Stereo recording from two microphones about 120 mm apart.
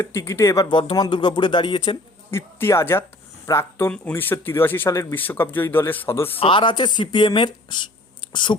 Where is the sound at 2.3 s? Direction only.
20° left (ahead or behind).